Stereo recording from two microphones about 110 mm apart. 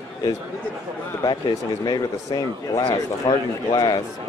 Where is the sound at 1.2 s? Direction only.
35° left (ahead or behind).